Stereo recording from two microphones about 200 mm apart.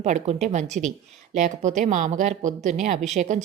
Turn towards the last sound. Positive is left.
turn(degrees=-35)  # may be behind; listen again after turning